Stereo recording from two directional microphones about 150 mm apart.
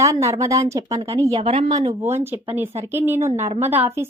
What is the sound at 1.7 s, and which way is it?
Speech, 25° right (ahead or behind).